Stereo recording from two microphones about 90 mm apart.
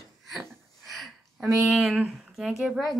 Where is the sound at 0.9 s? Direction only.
Centre (ahead or behind).